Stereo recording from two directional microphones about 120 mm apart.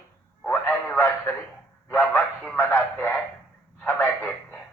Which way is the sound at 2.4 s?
15° left (ahead or behind).